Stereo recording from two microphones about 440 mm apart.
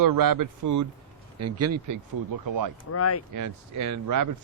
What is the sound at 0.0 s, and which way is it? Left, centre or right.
Speech, right.